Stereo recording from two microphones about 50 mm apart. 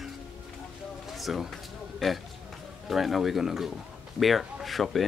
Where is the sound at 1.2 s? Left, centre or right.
Centre.